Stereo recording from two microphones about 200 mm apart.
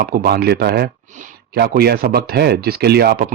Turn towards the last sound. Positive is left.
turn(degrees=-50)  # may be behind; listen again after turning